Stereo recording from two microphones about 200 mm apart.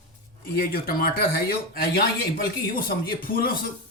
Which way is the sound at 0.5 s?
50° left (ahead or behind).